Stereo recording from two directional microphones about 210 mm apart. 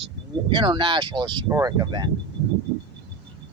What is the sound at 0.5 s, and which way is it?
Speech, 25° right (ahead or behind).